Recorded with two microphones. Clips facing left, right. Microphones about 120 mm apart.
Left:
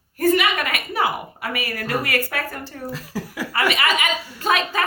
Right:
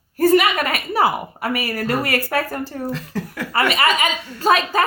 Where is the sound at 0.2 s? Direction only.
35° right (ahead or behind).